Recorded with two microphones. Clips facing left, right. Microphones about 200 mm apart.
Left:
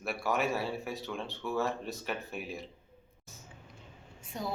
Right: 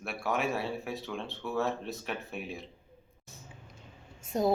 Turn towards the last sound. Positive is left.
turn(degrees=-45)  # may be behind; listen again after turning